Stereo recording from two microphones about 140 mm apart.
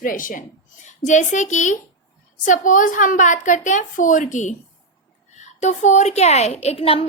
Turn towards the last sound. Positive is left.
turn(degrees=45)  # may be behind; listen again after turning